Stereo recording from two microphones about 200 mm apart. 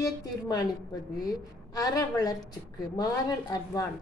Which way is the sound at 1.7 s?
20° left (ahead or behind).